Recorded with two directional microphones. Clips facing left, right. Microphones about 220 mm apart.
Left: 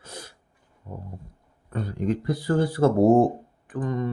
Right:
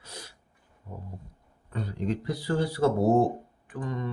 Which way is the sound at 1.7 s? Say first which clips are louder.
Left 4 dB; 50° left (ahead or behind).